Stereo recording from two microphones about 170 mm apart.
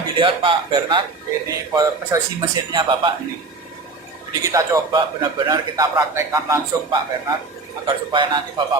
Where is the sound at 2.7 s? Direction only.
30° right (ahead or behind).